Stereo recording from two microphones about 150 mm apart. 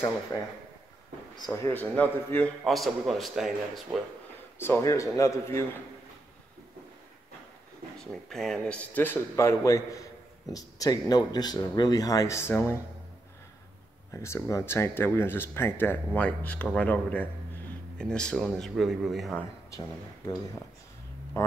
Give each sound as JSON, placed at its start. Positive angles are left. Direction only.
{"t": 0.3, "sound": "a man's voice", "side_deg": 25}
{"t": 4.6, "sound": "speech", "side_deg": 15}
{"t": 8.0, "sound": "speech", "side_deg": 0}
{"t": 14.1, "sound": "speech", "side_deg": 20}
{"t": 21.4, "sound": "speech", "side_deg": 20}